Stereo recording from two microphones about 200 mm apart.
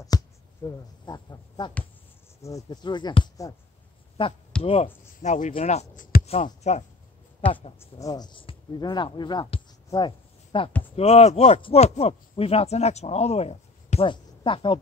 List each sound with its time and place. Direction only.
0.1 s a sound: 20° left (ahead or behind)
0.7 s speech: 20° left (ahead or behind)
4.6 s speech: 30° left (ahead or behind)
7.8 s speech: 20° left (ahead or behind)